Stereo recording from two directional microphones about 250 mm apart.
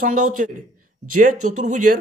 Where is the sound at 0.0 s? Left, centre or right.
Right.